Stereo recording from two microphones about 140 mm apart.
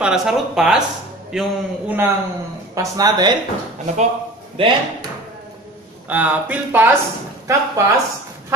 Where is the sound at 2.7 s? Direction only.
25° right (ahead or behind).